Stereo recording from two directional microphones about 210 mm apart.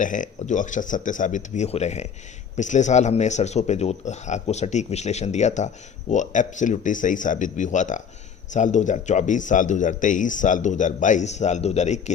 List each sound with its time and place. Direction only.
0.0 s speech: 35° left (ahead or behind)